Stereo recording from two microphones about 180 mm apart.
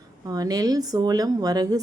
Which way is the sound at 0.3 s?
20° right (ahead or behind).